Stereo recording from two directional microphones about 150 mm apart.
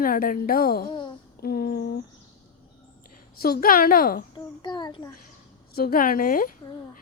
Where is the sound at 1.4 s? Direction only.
90° left.